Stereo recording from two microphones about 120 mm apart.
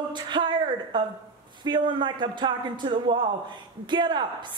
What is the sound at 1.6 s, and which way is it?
A woman's voice, 40° right (ahead or behind).